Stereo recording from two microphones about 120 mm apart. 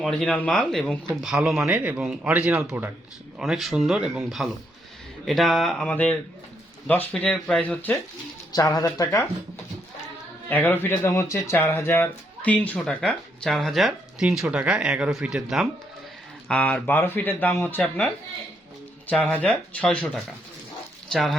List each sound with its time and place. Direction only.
0.0 s speech: centre (ahead or behind)
1.1 s speech: 5° right (ahead or behind)
3.3 s speech: 5° right (ahead or behind); by 7.9 s 15° left (ahead or behind)
8.5 s speech: 30° left (ahead or behind)
10.5 s speech: 15° left (ahead or behind); by 15.6 s 5° right (ahead or behind)
16.5 s speech: 10° left (ahead or behind)
19.1 s speech: 10° left (ahead or behind)